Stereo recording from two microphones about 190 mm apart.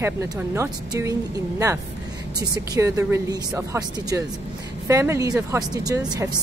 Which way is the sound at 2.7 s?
15° right (ahead or behind).